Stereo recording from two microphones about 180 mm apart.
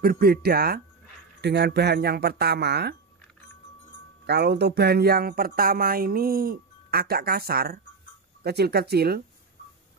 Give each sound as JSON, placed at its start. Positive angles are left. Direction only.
{"t": 0.0, "sound": "speech", "side_deg": -55}
{"t": 1.4, "sound": "speech", "side_deg": -70}
{"t": 4.3, "sound": "speech", "side_deg": -65}